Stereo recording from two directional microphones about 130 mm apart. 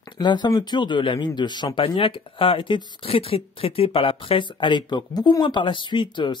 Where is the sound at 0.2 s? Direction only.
35° left (ahead or behind).